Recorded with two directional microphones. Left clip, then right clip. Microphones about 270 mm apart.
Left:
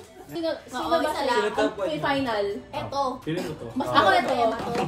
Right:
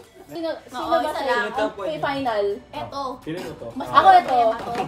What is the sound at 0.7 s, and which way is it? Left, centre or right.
Speech, centre.